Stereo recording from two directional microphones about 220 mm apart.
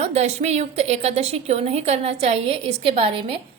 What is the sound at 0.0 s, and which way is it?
A woman's voice, 30° right (ahead or behind).